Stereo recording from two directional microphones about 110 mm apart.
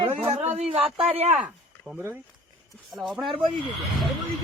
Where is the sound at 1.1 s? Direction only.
80° right.